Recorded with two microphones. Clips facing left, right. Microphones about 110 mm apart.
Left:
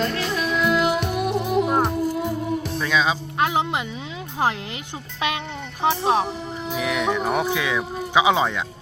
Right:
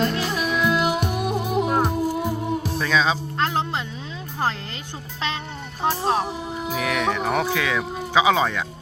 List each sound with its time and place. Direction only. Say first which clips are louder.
0.0 s music: right 1 dB; 10° right (ahead or behind)
2.8 s music: right 1 dB; 10° left (ahead or behind)
5.8 s speech: left 2 dB; 5° right (ahead or behind)
6.7 s speech: left 1 dB; 15° left (ahead or behind)